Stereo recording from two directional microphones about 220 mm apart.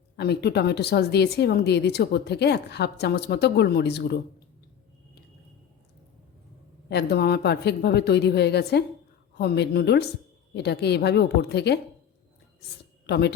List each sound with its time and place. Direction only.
0.2 s speech: 50° left (ahead or behind)
6.9 s speech: 50° left (ahead or behind)
13.1 s speech: 50° left (ahead or behind)